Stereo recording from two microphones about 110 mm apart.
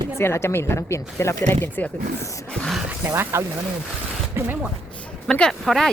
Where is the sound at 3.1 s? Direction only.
25° right (ahead or behind).